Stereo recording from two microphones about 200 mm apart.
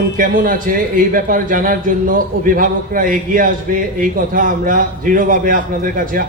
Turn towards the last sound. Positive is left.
turn(degrees=-45)  # may be behind; listen again after turning